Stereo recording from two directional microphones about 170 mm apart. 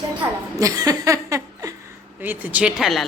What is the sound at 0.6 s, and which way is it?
Chuckle, 20° right (ahead or behind).